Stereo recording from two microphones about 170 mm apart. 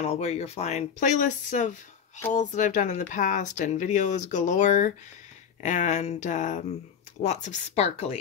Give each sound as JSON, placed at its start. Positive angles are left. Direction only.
{"t": 0.0, "sound": "speech", "side_deg": 40}